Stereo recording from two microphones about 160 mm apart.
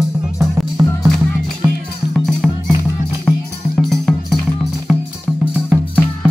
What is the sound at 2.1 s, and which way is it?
Music, 5° left (ahead or behind).